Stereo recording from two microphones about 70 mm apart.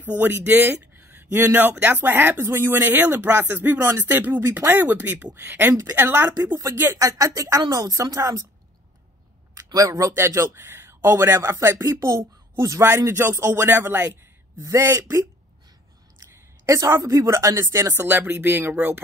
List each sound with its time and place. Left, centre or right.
0.0 s speech: right
4.0 s speech: right
6.3 s speech: right
7.0 s speech: right
9.6 s speech: right
11.5 s speech: right
12.8 s speech: right
14.6 s speech: right